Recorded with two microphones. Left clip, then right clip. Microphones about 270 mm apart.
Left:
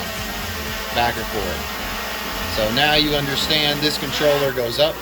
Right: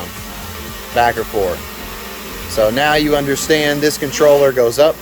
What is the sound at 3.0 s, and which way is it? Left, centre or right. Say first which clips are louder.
Speech: right 4 dB; right.